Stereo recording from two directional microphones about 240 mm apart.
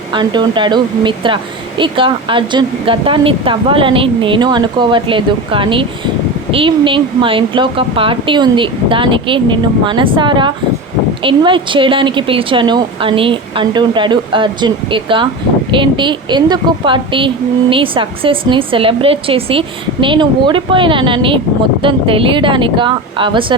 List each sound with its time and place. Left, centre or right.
0.1 s a woman's voice: centre